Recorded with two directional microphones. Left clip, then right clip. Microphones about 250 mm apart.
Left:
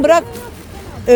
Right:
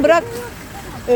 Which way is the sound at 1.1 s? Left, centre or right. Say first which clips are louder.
Left 6 dB; left.